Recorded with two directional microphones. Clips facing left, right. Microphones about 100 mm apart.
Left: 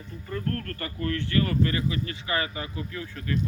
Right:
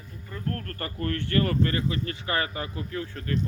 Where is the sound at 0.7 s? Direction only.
40° right (ahead or behind).